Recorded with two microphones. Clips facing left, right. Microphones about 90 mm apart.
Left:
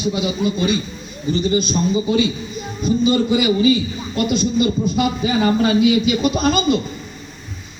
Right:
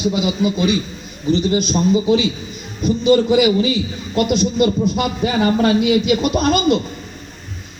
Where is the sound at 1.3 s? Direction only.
65° right (ahead or behind).